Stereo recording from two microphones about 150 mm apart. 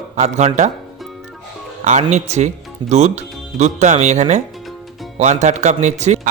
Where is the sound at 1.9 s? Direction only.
50° right (ahead or behind).